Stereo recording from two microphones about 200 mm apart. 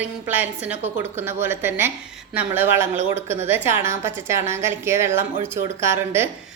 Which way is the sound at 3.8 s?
15° right (ahead or behind).